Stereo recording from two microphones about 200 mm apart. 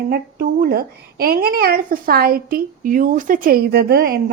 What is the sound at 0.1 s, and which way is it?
A woman's voice, 50° right (ahead or behind).